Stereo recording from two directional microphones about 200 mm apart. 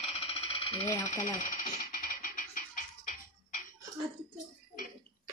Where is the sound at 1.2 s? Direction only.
40° left (ahead or behind).